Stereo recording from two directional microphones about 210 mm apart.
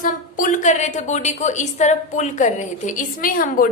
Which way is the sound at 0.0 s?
40° left (ahead or behind).